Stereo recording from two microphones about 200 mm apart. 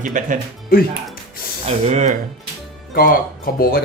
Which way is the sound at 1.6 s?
35° right (ahead or behind).